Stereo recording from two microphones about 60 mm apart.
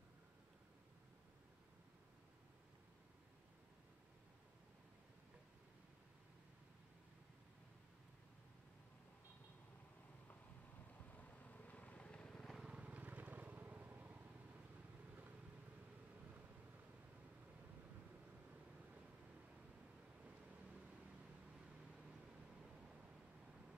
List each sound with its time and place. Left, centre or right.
11.1 s vehicle: left; by 12.5 s centre
12.6 s vehicle: right